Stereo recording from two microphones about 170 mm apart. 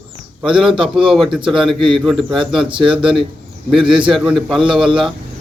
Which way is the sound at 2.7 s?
30° right (ahead or behind).